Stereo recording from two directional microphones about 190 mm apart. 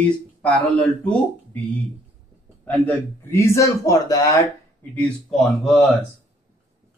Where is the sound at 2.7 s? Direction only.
10° left (ahead or behind).